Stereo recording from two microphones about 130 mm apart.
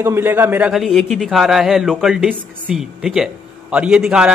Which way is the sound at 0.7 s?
Centre (ahead or behind).